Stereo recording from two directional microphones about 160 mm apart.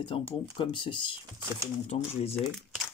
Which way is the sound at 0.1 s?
35° left (ahead or behind).